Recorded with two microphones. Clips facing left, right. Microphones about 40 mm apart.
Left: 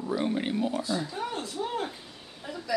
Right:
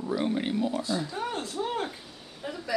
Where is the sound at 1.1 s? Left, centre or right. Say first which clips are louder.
Right 1 dB; right.